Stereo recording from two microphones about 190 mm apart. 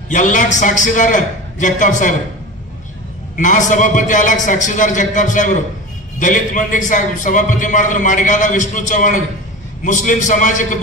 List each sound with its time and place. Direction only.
0.1 s a man's voice: 40° left (ahead or behind)
3.3 s a man's voice: 40° left (ahead or behind)